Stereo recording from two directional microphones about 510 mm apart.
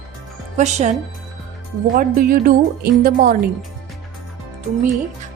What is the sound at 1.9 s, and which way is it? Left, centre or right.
A woman's voice, centre.